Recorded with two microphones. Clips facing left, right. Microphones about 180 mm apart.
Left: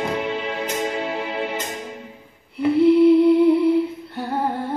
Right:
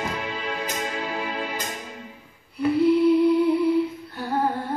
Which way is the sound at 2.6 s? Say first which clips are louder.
Left 4 dB; 25° left (ahead or behind).